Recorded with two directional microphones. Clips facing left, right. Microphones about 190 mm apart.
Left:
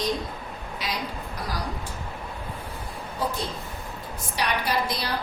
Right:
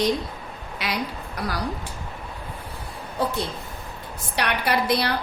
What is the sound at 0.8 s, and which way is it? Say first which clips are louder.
Speech: right 3 dB; 65° right (ahead or behind).